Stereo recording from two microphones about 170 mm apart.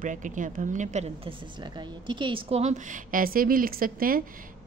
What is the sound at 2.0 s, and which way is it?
Speech, 30° right (ahead or behind).